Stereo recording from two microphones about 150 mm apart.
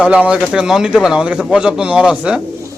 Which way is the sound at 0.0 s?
5° right (ahead or behind).